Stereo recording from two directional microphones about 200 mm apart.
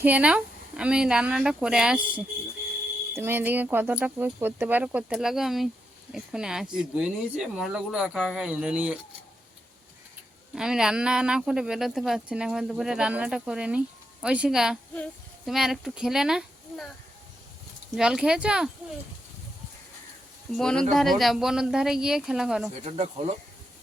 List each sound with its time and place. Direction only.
0.0 s speech: 5° right (ahead or behind)
10.5 s speech: 5° right (ahead or behind)
17.9 s speech: 5° right (ahead or behind)
20.5 s speech: 5° left (ahead or behind)
22.8 s speech: 30° right (ahead or behind)